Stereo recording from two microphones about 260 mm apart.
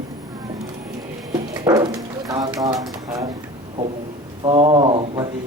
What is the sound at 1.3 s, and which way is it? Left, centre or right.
Bird, centre.